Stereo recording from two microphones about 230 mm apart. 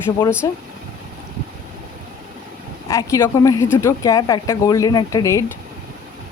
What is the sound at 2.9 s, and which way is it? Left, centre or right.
Speech, centre.